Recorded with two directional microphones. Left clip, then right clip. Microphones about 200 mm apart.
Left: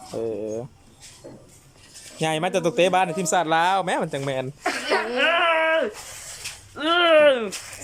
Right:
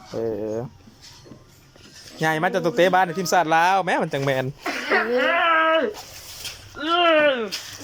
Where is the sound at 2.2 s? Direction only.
10° left (ahead or behind).